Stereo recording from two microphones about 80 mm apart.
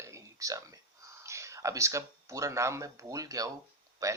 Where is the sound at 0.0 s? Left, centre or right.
Right.